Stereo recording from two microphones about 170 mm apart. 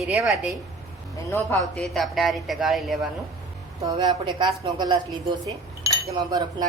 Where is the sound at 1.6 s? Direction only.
Centre (ahead or behind).